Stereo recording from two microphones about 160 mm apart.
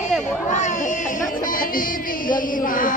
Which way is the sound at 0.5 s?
50° left (ahead or behind).